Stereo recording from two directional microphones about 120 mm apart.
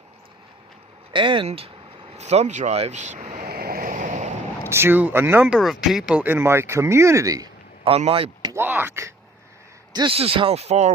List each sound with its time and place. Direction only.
1.1 s speech: 45° right (ahead or behind)
1.5 s speech: 55° right (ahead or behind)
2.1 s vehicle: 65° right (ahead or behind); by 4.3 s 90° right
4.7 s speech: 20° right (ahead or behind)
5.5 s speech: 5° right (ahead or behind); by 7.5 s 30° right (ahead or behind)
7.9 s speech: 55° right (ahead or behind)
8.5 s speech: 15° right (ahead or behind)
9.9 s a man's voice: 40° right (ahead or behind)
10.2 s speech: 50° right (ahead or behind); by 10.9 s 65° right (ahead or behind)